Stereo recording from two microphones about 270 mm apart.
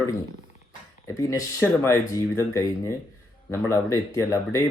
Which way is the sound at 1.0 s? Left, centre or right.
Centre.